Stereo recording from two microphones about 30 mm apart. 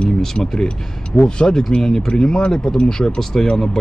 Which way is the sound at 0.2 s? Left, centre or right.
Centre.